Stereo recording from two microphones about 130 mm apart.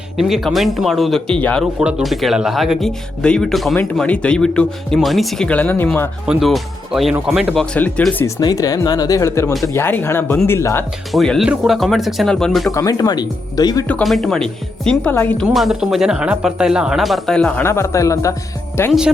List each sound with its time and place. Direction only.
0.2 s speech: centre (ahead or behind)
1.8 s speech: 5° right (ahead or behind); by 6.1 s 15° left (ahead or behind)
6.2 s speech: centre (ahead or behind)
8.4 s speech: 30° left (ahead or behind)
9.5 s speech: centre (ahead or behind)
9.7 s speech: 15° left (ahead or behind)
11.1 s speech: centre (ahead or behind)
12.7 s speech: 30° left (ahead or behind)
13.8 s speech: 5° left (ahead or behind)
17.7 s speech: 20° left (ahead or behind)